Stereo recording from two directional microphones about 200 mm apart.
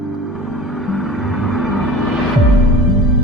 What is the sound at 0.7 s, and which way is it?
Music, centre (ahead or behind).